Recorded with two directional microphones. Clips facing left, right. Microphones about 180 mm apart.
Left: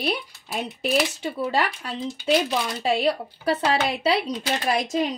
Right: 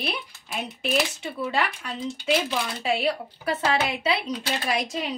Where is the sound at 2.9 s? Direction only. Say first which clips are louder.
Left 3 dB; 35° left (ahead or behind).